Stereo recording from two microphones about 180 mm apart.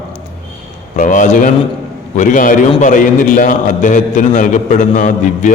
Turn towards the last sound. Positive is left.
turn(degrees=45)  # may be behind; listen again after turning